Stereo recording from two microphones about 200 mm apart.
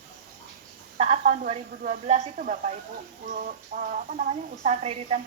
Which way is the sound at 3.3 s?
45° right (ahead or behind).